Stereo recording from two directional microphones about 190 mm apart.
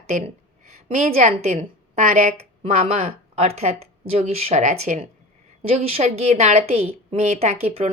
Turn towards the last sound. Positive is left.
turn(degrees=-30)  # may be behind; listen again after turning